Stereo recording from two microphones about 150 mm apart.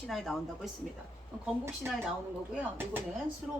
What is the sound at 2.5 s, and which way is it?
Speech, 15° right (ahead or behind).